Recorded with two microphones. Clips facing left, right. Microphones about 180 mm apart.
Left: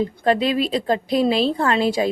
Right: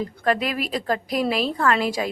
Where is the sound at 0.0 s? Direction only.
25° left (ahead or behind).